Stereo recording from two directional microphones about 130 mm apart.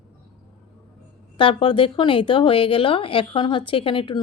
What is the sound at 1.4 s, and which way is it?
A woman's voice, 40° left (ahead or behind).